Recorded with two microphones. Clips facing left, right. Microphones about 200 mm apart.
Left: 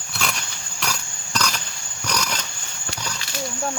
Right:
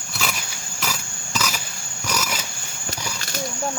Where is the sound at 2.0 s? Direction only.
5° right (ahead or behind).